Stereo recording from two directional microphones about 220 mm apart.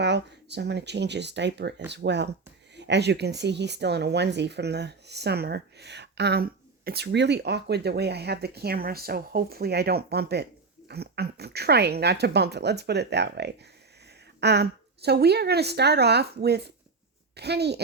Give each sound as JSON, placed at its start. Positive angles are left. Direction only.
{"t": 0.0, "sound": "speech", "side_deg": -50}